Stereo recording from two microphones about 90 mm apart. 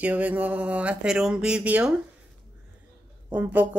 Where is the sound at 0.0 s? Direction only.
15° right (ahead or behind).